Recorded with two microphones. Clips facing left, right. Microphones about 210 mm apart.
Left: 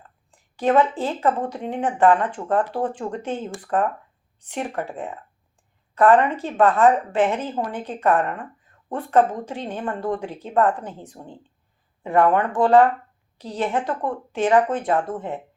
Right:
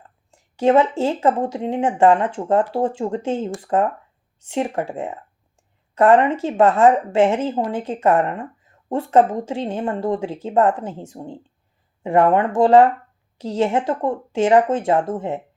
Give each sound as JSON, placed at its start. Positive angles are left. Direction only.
{"t": 0.5, "sound": "speech", "side_deg": -25}